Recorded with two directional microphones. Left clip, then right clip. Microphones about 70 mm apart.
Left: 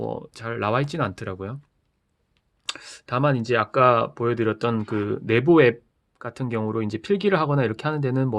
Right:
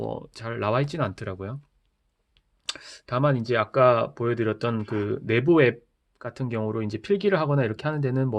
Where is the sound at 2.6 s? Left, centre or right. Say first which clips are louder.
Left 2 dB; left.